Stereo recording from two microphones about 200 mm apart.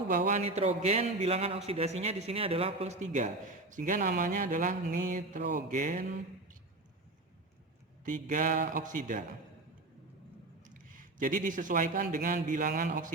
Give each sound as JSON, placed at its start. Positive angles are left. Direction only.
{"t": 0.1, "sound": "a man's voice", "side_deg": -40}
{"t": 8.0, "sound": "a man's voice", "side_deg": -40}
{"t": 10.6, "sound": "speech", "side_deg": -40}